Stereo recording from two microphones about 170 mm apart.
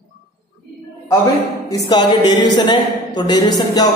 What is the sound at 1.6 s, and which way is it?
Speech, 20° left (ahead or behind).